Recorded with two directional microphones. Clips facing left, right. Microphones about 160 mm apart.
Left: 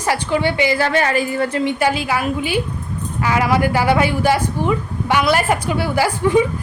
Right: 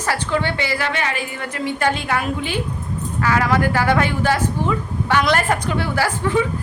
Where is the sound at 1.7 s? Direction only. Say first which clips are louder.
Left 2 dB; 5° left (ahead or behind).